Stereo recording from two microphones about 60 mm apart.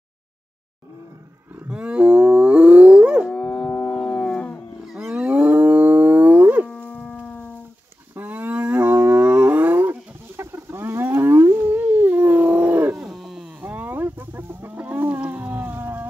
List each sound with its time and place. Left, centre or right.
1.7 s wild animals: centre
3.7 s dog: centre
4.8 s wild animals: centre
5.1 s wild animals: centre
6.7 s livestock: centre
7.2 s music: centre
8.2 s livestock: right
10.3 s a sound: right
12.9 s a sound: centre
13.6 s chicken: right
15.1 s a sound: right